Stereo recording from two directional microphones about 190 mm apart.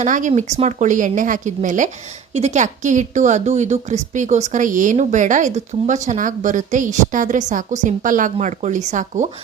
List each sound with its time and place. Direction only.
0.0 s speech: 40° right (ahead or behind)